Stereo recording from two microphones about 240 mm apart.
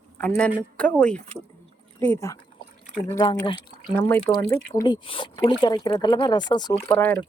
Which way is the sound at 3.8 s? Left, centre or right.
Centre.